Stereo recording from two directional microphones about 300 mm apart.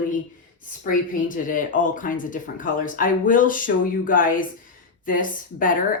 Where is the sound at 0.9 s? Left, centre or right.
Left.